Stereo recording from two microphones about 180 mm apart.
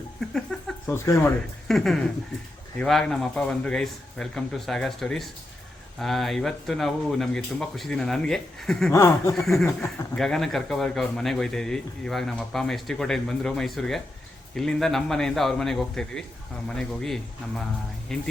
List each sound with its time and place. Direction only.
0.2 s speech: centre (ahead or behind)
0.9 s speech: 15° left (ahead or behind)
1.6 s speech: centre (ahead or behind)
8.9 s speech: 15° left (ahead or behind)
9.3 s speech: centre (ahead or behind)